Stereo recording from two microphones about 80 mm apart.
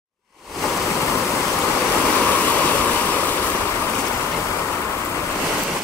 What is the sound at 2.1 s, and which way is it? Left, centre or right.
Waves, left.